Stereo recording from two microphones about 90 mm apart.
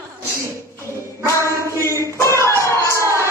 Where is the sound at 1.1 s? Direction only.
35° left (ahead or behind).